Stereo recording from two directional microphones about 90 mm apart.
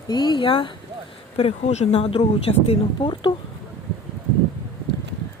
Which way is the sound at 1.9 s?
90° left.